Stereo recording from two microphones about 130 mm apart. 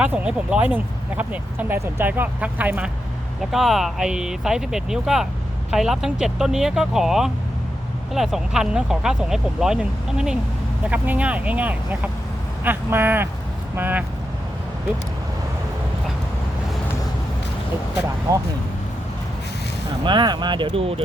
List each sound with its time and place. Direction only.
0.0 s speech: 10° right (ahead or behind)
18.3 s speech: 30° right (ahead or behind)
20.1 s speech: 35° right (ahead or behind)